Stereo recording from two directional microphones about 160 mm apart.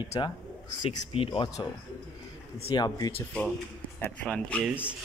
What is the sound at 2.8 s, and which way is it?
Speech, 20° left (ahead or behind).